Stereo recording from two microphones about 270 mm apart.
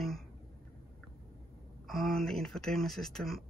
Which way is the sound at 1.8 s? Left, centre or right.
Centre.